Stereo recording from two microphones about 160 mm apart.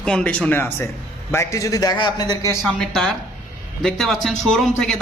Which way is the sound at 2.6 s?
5° left (ahead or behind).